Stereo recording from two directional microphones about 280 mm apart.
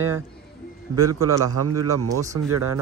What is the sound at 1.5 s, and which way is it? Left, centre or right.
Speech, right.